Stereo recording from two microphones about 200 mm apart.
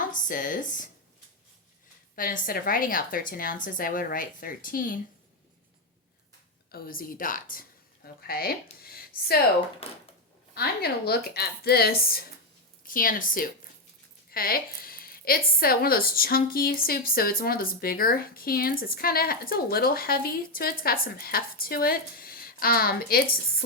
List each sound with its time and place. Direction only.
0.1 s speech: 40° left (ahead or behind)
2.1 s a woman's voice: 45° left (ahead or behind)
6.7 s a woman's voice: 50° left (ahead or behind)
10.5 s a woman's voice: 50° left (ahead or behind)